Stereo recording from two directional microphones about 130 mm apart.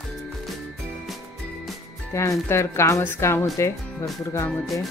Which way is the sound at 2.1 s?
20° left (ahead or behind).